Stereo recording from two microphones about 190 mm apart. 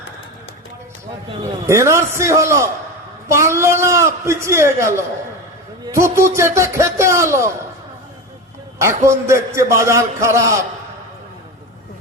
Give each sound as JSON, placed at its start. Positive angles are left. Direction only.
{"t": 1.6, "sound": "a man's voice", "side_deg": -15}
{"t": 8.8, "sound": "a man's voice", "side_deg": -15}